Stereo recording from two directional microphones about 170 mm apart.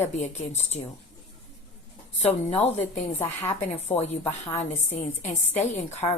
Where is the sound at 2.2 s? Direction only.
40° left (ahead or behind).